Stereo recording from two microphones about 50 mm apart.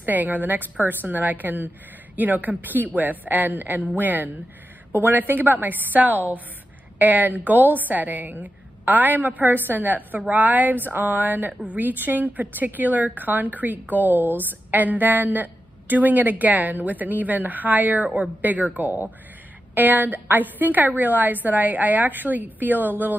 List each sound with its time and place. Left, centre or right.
0.0 s a woman's voice: right